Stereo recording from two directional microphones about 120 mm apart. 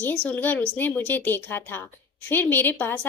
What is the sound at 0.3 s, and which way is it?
A woman's voice, 15° left (ahead or behind).